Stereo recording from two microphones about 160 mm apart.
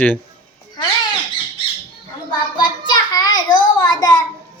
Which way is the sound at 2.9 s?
25° left (ahead or behind).